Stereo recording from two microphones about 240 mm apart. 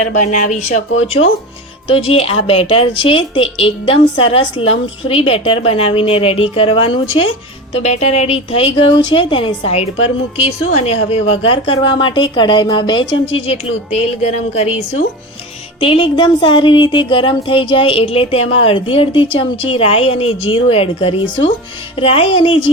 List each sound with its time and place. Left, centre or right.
0.0 s speech: left
15.8 s speech: left